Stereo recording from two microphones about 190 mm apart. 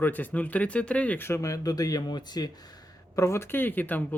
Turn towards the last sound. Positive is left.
turn(degrees=10)  # may be behind; listen again after turning